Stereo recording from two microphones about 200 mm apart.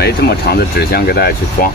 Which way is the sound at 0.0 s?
50° left (ahead or behind).